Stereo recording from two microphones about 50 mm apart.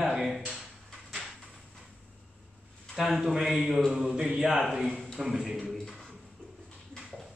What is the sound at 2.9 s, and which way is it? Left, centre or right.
A man's voice, centre.